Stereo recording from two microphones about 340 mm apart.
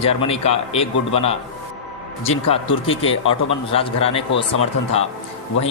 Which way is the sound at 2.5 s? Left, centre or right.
Centre.